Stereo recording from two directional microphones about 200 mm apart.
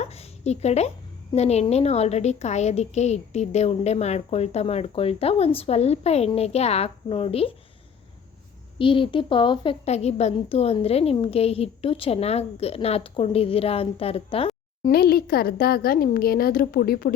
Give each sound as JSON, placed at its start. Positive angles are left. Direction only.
{"t": 0.0, "sound": "a sound", "side_deg": 30}
{"t": 1.3, "sound": "a woman's voice", "side_deg": 35}
{"t": 8.8, "sound": "a woman's voice", "side_deg": 25}
{"t": 14.8, "sound": "a woman's voice", "side_deg": 50}